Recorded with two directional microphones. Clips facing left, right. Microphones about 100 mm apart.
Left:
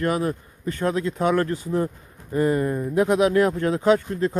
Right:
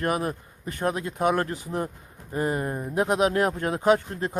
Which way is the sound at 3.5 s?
20° right (ahead or behind).